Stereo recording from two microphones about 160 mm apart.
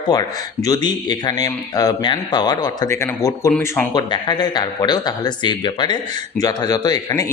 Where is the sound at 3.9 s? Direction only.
25° left (ahead or behind).